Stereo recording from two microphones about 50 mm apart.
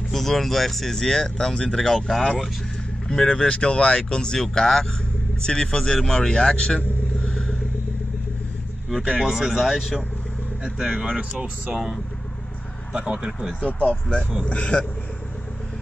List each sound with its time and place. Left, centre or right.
0.1 s speech: centre
3.1 s speech: centre
7.2 s vehicle: centre
9.0 s speech: centre
10.6 s speech: centre
12.9 s speech: centre
13.6 s speech: left